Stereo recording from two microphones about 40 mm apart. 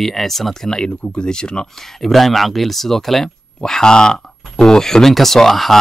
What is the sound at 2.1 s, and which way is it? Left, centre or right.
Speech, centre.